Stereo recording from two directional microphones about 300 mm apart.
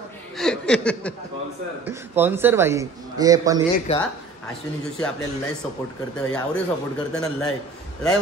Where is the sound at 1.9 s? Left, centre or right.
Centre.